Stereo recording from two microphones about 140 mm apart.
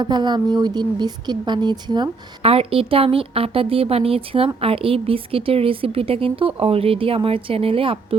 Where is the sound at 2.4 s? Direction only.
45° right (ahead or behind).